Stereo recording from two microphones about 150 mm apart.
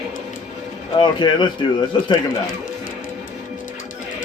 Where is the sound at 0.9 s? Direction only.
30° left (ahead or behind).